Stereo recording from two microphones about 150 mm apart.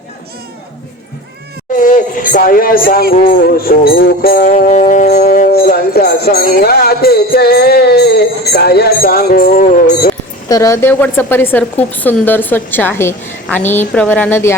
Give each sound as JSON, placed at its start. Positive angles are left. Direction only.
{"t": 1.7, "sound": "speech", "side_deg": 60}
{"t": 3.1, "sound": "music", "side_deg": 80}
{"t": 4.5, "sound": "music", "side_deg": 55}
{"t": 5.2, "sound": "music", "side_deg": 75}
{"t": 5.7, "sound": "music", "side_deg": 90}
{"t": 10.5, "sound": "speech", "side_deg": 20}